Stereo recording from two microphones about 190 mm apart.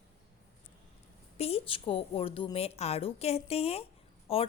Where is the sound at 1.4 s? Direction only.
30° left (ahead or behind).